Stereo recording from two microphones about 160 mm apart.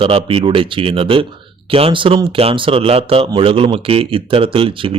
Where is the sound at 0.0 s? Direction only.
35° right (ahead or behind).